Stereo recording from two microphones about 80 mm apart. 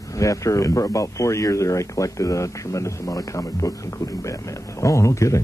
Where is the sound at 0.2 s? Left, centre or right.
Left.